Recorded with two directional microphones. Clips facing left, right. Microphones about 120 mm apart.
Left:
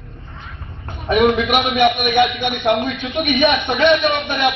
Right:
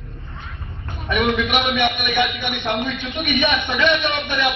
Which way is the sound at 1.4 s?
45° left (ahead or behind).